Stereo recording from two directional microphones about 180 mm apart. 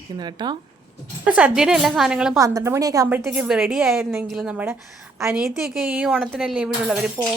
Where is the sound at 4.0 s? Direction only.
15° right (ahead or behind).